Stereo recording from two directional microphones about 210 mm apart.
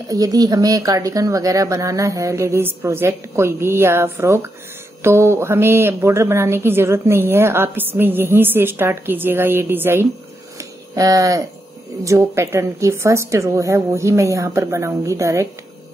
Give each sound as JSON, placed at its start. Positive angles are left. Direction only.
{"t": 0.1, "sound": "a woman's voice", "side_deg": -15}
{"t": 10.6, "sound": "a sound", "side_deg": -15}
{"t": 12.0, "sound": "a woman's voice", "side_deg": -15}